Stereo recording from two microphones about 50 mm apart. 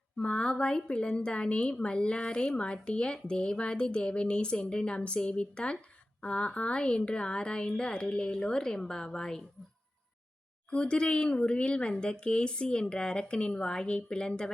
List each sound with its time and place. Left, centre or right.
0.2 s a woman's voice: left
10.7 s a woman's voice: left